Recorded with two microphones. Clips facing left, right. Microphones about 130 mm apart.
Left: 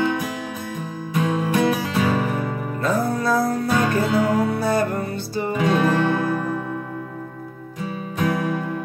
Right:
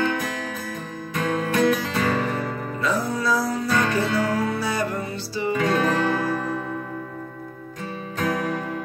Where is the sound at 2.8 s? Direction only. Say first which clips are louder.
Left 3 dB; 50° left (ahead or behind).